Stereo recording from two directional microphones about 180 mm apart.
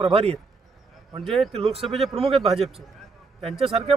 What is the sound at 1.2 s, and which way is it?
Speech, centre (ahead or behind).